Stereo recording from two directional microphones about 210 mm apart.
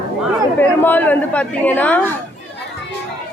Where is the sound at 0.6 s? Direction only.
10° left (ahead or behind).